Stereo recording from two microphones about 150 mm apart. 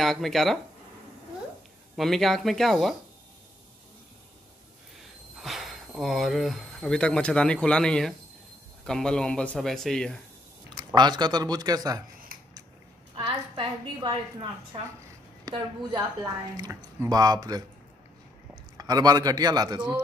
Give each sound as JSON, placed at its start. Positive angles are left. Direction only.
{"t": 0.0, "sound": "speech", "side_deg": 0}
{"t": 2.0, "sound": "speech", "side_deg": 0}
{"t": 5.4, "sound": "speech", "side_deg": 0}
{"t": 11.0, "sound": "speech", "side_deg": -30}
{"t": 13.1, "sound": "a woman's voice", "side_deg": -30}
{"t": 15.4, "sound": "a woman's voice", "side_deg": -30}